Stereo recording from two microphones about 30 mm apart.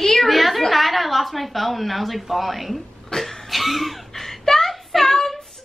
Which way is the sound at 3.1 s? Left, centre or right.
Centre.